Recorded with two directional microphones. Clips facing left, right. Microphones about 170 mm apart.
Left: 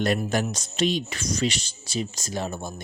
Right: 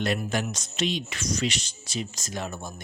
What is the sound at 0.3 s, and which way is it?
Speech, 40° left (ahead or behind).